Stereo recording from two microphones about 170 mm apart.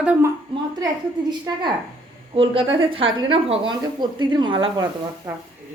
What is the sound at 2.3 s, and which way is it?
Speech, 30° right (ahead or behind).